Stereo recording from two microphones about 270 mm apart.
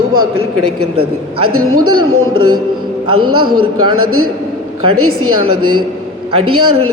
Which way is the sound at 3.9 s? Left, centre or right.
Right.